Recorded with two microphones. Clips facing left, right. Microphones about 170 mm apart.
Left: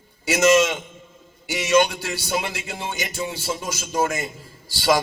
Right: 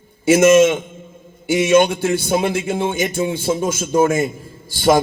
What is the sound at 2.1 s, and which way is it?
A man's voice, 55° right (ahead or behind).